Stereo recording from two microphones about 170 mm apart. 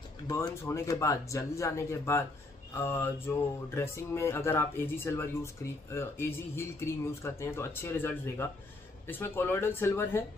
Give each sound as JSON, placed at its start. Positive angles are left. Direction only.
{"t": 0.3, "sound": "speech", "side_deg": 15}